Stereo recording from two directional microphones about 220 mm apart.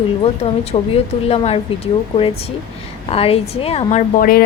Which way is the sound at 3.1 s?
25° left (ahead or behind).